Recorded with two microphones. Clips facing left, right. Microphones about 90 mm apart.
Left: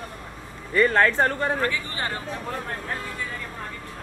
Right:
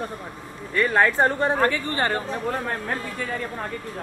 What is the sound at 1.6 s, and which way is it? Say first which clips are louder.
Speech: right 5 dB; 45° right (ahead or behind).